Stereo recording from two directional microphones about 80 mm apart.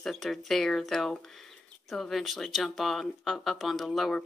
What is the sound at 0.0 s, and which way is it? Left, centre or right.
Speech, centre.